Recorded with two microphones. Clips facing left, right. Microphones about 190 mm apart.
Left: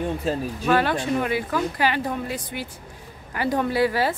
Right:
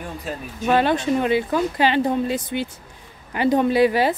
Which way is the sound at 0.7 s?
20° right (ahead or behind).